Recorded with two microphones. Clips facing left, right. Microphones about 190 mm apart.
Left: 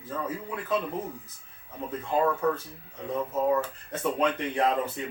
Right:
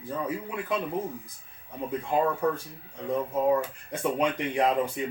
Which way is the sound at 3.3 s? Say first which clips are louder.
Even; 10° right (ahead or behind).